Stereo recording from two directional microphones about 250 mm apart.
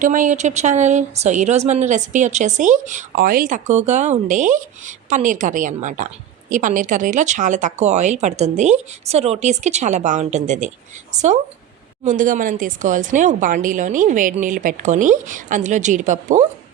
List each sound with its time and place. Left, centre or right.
0.0 s speech: right
12.0 s speech: right